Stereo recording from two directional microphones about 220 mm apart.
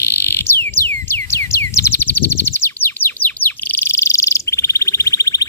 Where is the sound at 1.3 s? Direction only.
10° left (ahead or behind).